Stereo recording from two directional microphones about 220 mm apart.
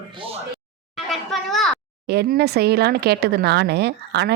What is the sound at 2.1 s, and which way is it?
Speech, 45° right (ahead or behind).